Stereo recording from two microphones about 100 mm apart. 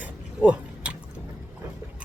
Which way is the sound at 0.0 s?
15° right (ahead or behind).